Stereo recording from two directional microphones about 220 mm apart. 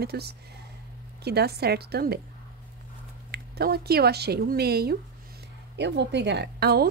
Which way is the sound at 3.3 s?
45° right (ahead or behind).